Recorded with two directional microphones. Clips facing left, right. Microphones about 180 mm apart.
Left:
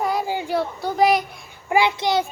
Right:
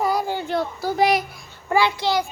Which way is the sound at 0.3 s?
10° left (ahead or behind).